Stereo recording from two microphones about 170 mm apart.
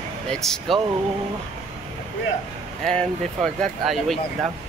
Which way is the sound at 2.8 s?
Centre (ahead or behind).